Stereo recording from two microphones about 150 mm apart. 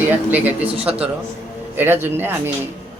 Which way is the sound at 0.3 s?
10° right (ahead or behind).